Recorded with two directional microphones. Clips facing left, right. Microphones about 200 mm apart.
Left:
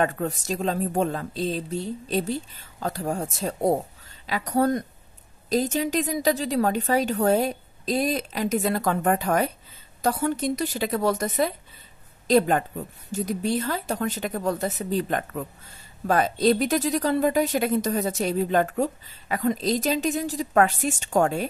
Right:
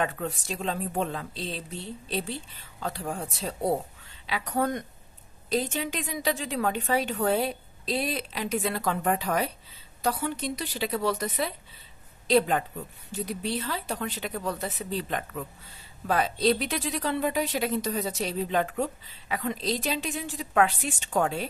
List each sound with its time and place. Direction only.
0.0 s a woman's voice: 45° left (ahead or behind)